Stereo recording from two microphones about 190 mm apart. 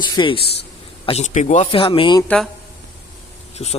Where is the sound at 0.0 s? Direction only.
25° left (ahead or behind).